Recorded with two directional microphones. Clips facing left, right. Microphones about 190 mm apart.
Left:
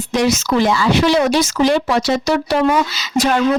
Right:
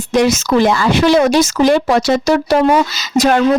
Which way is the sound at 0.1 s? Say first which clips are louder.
Right 4 dB; 50° right (ahead or behind).